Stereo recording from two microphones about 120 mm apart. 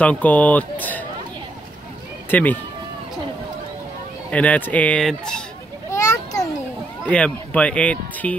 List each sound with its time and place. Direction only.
0.0 s speech: 10° left (ahead or behind)
2.3 s speech: 15° left (ahead or behind)
4.3 s speech: 10° left (ahead or behind)
5.9 s children playing: 30° left (ahead or behind)
7.1 s speech: 10° left (ahead or behind)